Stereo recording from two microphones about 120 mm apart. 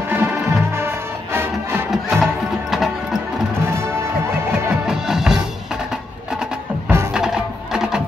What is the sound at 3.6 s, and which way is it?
Music, 20° right (ahead or behind).